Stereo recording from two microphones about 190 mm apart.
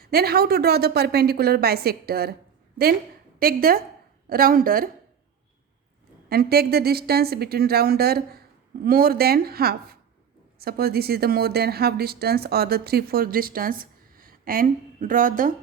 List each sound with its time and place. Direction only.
0.0 s speech: 55° right (ahead or behind)
3.3 s speech: 50° right (ahead or behind)
6.2 s a woman's voice: 55° right (ahead or behind)